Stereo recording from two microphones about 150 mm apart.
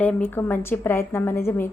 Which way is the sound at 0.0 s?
10° left (ahead or behind).